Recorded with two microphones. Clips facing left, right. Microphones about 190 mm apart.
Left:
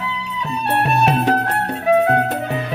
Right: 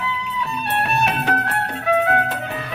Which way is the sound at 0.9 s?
35° left (ahead or behind).